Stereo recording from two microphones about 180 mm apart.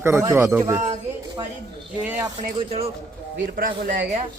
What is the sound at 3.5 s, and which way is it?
Speech, 50° right (ahead or behind).